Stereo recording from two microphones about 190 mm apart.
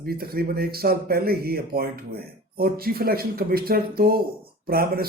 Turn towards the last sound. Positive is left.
turn(degrees=-50)  # may be behind; listen again after turning